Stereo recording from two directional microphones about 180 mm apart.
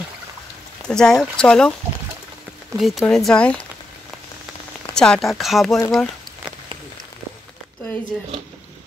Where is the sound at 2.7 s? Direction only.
Centre (ahead or behind).